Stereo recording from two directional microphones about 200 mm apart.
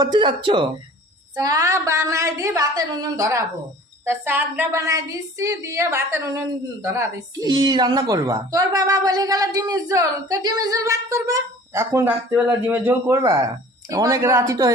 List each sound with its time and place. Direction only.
0.0 s a woman's voice: 20° right (ahead or behind)